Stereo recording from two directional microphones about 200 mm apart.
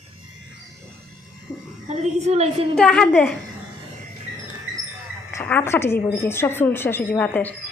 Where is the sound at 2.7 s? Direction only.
5° left (ahead or behind).